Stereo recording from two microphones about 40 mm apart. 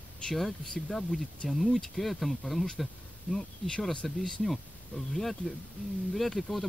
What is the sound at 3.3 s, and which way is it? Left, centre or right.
Speech, centre.